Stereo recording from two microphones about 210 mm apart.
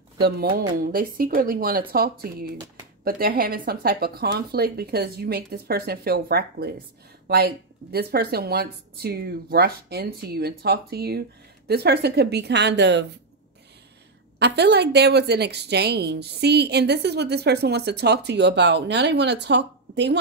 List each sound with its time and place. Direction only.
0.2 s a woman's voice: 45° right (ahead or behind)
2.5 s speech: 20° right (ahead or behind)
3.0 s a woman's voice: 45° right (ahead or behind)
14.4 s a woman's voice: 50° right (ahead or behind)